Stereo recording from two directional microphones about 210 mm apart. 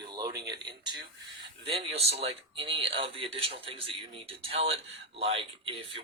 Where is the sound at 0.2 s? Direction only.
20° right (ahead or behind).